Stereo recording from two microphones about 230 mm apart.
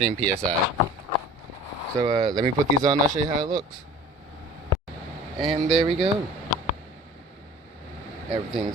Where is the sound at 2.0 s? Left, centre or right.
Centre.